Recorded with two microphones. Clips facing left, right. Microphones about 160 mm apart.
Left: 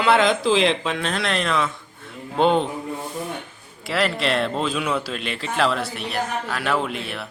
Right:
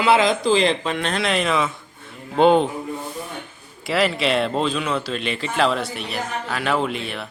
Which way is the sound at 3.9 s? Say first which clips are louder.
Right 2 dB; centre (ahead or behind).